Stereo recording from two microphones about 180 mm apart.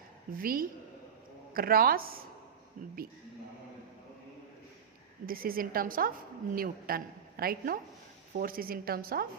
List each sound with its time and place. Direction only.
0.3 s a woman's voice: 55° right (ahead or behind)
5.2 s a woman's voice: 55° right (ahead or behind)